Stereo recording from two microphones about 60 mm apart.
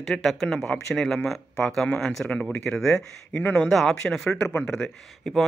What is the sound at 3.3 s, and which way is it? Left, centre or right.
Speech, left.